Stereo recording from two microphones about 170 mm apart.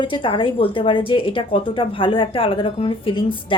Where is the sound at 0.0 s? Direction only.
30° left (ahead or behind).